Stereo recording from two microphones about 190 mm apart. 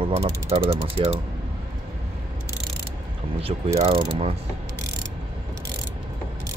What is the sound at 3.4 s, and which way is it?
Mechanisms, 30° right (ahead or behind).